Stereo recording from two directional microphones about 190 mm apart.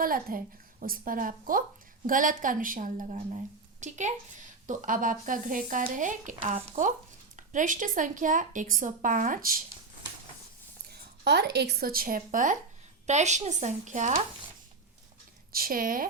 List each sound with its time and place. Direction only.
0.0 s speech: 50° right (ahead or behind)
10.8 s speech: 60° right (ahead or behind); by 14.2 s 40° right (ahead or behind)
15.5 s speech: 50° right (ahead or behind)